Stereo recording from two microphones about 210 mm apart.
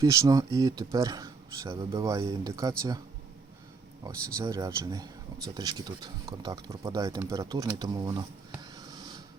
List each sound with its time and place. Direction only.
0.0 s speech: 15° right (ahead or behind)
4.4 s speech: 15° right (ahead or behind)